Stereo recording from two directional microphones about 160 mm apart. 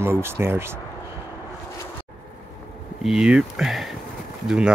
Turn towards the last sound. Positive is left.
turn(degrees=-5)  # may be behind; listen again after turning